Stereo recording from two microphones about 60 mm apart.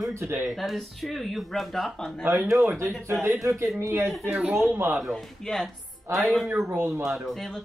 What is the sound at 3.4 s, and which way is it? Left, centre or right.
Speech, right.